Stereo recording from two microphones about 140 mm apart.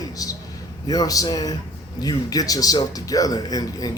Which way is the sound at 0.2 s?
25° left (ahead or behind).